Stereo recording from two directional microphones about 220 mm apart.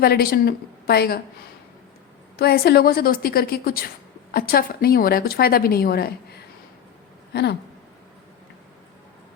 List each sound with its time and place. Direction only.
0.0 s a woman's voice: 45° left (ahead or behind)
2.3 s a woman's voice: 45° left (ahead or behind)